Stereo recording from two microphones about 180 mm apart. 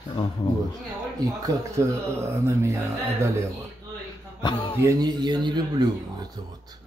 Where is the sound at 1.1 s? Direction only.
20° right (ahead or behind).